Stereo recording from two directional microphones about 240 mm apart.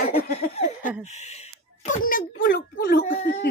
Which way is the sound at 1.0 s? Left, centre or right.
Left.